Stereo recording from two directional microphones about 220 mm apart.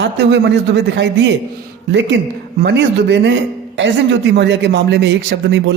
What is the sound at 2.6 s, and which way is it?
A man's voice, 50° right (ahead or behind).